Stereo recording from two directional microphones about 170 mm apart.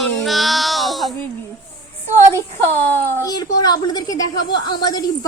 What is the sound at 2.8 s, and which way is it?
Speech, 20° left (ahead or behind).